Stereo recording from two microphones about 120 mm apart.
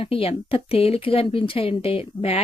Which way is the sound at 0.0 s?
50° left (ahead or behind).